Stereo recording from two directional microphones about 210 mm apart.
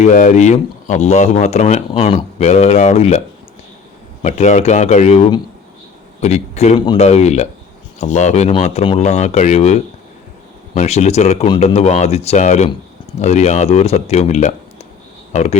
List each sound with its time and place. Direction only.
0.0 s speech: 35° left (ahead or behind)
4.2 s speech: 35° left (ahead or behind)